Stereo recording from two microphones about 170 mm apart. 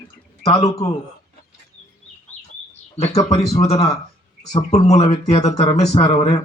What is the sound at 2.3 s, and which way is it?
Chicken, 10° left (ahead or behind).